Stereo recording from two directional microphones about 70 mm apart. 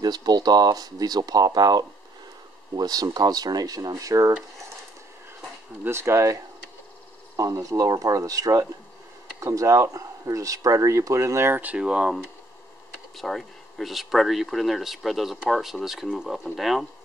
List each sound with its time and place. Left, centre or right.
0.0 s speech: right
5.9 s speech: right
11.5 s speech: centre
13.1 s speech: centre